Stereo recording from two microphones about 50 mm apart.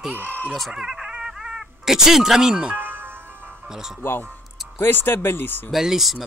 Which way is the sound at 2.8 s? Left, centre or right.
Right.